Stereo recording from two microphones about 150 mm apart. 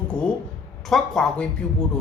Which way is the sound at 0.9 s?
5° left (ahead or behind).